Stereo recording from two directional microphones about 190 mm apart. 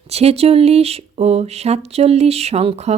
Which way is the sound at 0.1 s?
30° right (ahead or behind).